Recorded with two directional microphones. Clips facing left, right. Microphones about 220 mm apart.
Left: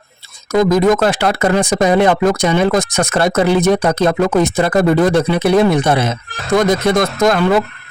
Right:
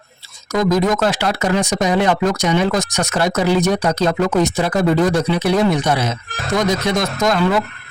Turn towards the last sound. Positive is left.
turn(degrees=55)  # may be behind; listen again after turning